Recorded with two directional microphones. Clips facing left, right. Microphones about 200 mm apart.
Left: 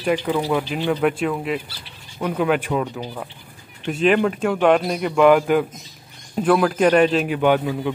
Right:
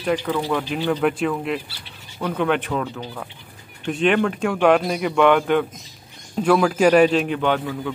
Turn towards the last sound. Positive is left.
turn(degrees=15)  # may be behind; listen again after turning